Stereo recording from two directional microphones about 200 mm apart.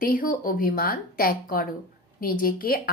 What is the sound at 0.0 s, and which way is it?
Speech, 45° left (ahead or behind).